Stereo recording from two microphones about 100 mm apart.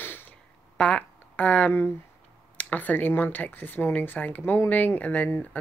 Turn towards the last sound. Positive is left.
turn(degrees=15)  # may be behind; listen again after turning